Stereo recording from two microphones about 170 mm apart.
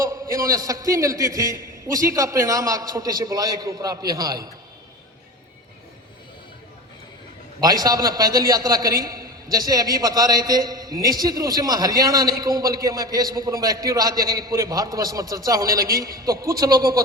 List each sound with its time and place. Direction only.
0.0 s a man's voice: 20° right (ahead or behind)
7.6 s a man's voice: 20° right (ahead or behind)